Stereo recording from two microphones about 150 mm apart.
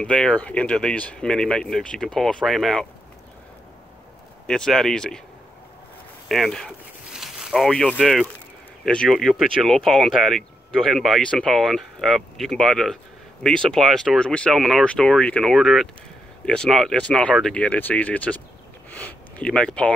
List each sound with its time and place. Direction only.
0.0 s speech: 5° left (ahead or behind)
4.5 s speech: 5° left (ahead or behind)
6.2 s speech: centre (ahead or behind)